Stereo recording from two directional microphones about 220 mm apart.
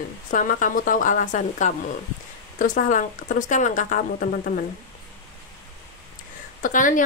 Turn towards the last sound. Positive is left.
turn(degrees=35)  # may be behind; listen again after turning